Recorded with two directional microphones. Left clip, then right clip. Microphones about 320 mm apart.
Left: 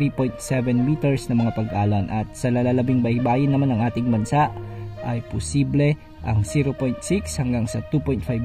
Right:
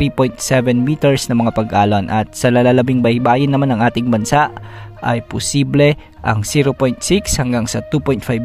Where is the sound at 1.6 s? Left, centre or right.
Right.